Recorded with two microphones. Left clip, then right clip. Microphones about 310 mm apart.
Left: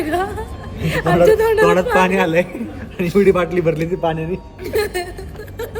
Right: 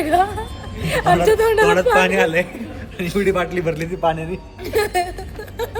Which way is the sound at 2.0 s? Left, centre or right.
Centre.